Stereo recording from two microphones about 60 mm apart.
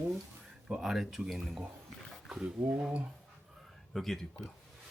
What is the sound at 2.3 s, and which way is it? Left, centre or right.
Speech, centre.